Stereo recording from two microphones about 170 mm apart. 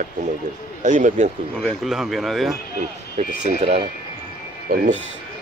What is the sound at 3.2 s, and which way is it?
Speech, 40° right (ahead or behind).